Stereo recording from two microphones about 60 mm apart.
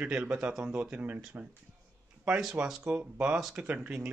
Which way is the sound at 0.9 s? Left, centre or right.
Right.